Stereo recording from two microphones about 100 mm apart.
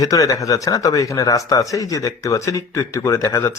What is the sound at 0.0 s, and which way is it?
Speech, 35° left (ahead or behind).